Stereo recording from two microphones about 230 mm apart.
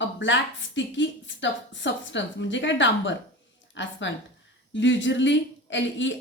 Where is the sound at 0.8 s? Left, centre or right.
Left.